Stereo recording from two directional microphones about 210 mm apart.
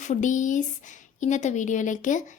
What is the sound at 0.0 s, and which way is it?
A woman's voice, 35° left (ahead or behind).